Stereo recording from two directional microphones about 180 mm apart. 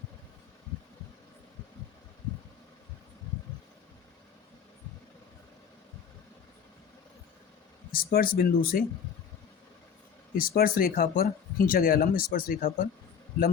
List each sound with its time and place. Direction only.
7.9 s speech: 55° left (ahead or behind)
10.3 s speech: 55° left (ahead or behind)